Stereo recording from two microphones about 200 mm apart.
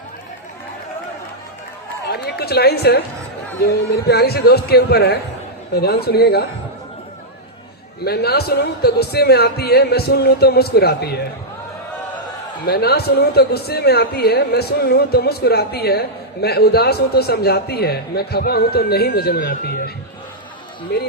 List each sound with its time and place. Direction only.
2.0 s a man's voice: 55° left (ahead or behind)
8.0 s a man's voice: 55° left (ahead or behind)
12.6 s a man's voice: 50° left (ahead or behind)
20.9 s speech: 55° left (ahead or behind)